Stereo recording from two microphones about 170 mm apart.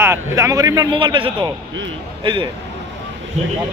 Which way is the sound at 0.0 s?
15° right (ahead or behind).